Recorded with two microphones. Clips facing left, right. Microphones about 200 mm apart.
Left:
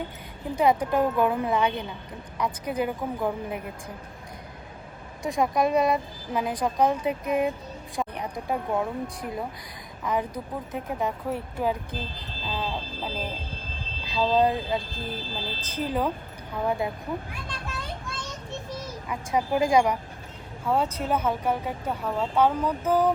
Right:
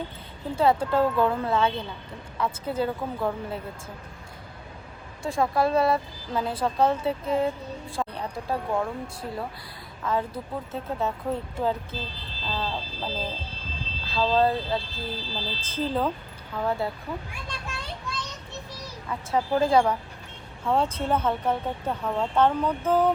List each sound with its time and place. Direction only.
0.5 s a woman's voice: 15° left (ahead or behind)
5.2 s a woman's voice: 15° left (ahead or behind)
12.0 s speech: 50° left (ahead or behind)
12.5 s a woman's voice: 15° left (ahead or behind)
15.1 s speech: 50° left (ahead or behind)
15.7 s a woman's voice: 10° left (ahead or behind)
19.0 s a woman's voice: 15° left (ahead or behind)